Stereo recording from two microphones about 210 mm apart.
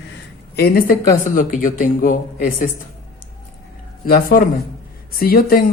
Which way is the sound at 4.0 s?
45° left (ahead or behind).